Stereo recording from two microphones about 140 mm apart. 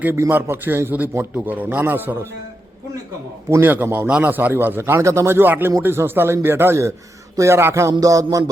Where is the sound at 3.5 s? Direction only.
15° right (ahead or behind).